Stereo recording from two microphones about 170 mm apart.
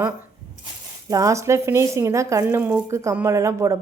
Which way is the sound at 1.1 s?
20° right (ahead or behind).